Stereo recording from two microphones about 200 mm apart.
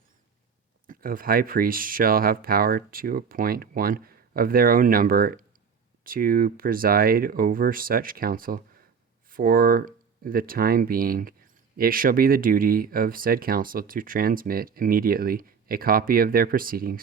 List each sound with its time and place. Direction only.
0.9 s speech: 45° right (ahead or behind)